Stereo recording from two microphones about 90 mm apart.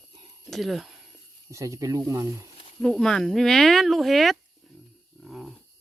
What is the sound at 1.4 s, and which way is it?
Speech, 35° right (ahead or behind).